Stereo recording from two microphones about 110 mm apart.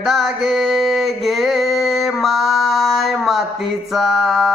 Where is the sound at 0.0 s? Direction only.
Centre (ahead or behind).